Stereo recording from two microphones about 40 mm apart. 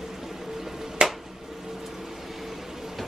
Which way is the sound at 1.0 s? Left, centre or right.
Centre.